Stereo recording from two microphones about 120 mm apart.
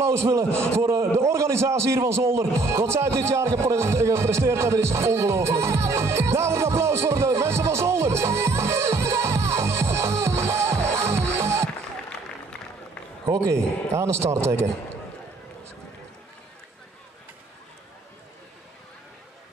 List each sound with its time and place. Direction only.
0.0 s a man's voice: 20° right (ahead or behind)
13.2 s a man's voice: 25° right (ahead or behind)